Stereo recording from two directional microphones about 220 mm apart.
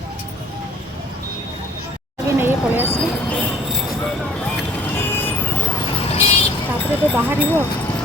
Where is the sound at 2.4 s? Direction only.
10° right (ahead or behind).